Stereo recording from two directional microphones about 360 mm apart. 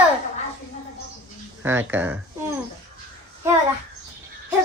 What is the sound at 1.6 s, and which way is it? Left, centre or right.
Speech, centre.